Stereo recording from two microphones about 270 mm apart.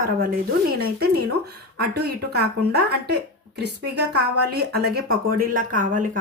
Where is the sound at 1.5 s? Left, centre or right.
Right.